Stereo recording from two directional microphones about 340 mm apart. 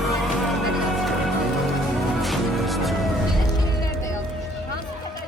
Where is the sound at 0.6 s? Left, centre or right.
Centre.